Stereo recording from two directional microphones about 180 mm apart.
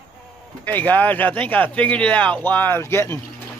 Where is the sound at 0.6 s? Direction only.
10° left (ahead or behind).